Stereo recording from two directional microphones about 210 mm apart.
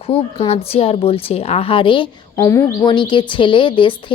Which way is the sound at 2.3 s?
15° left (ahead or behind).